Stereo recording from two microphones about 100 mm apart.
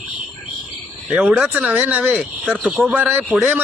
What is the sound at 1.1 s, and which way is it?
A man's voice, 10° right (ahead or behind).